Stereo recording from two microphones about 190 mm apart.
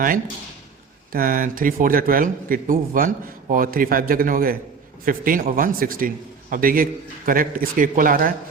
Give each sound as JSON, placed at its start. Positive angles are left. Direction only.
{"t": 1.1, "sound": "a man's voice", "side_deg": -50}